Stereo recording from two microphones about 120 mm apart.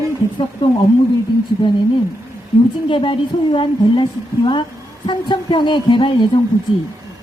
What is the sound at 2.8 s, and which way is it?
A woman's voice, 45° left (ahead or behind).